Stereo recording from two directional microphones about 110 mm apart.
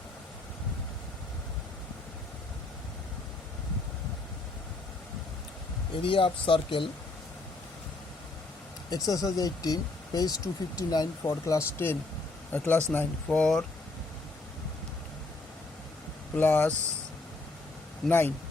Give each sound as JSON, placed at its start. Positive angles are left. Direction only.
{"t": 6.0, "sound": "speech", "side_deg": 50}
{"t": 9.0, "sound": "speech", "side_deg": 35}
{"t": 16.4, "sound": "speech", "side_deg": 15}
{"t": 18.0, "sound": "speech", "side_deg": 0}